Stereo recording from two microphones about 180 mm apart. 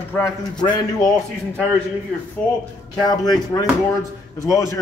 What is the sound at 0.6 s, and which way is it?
Speech, 25° left (ahead or behind).